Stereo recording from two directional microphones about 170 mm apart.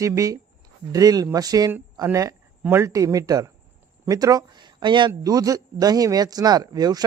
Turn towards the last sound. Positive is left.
turn(degrees=-25)  # may be behind; listen again after turning